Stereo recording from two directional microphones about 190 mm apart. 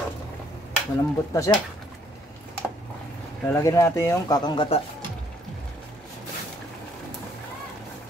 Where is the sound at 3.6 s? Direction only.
15° left (ahead or behind).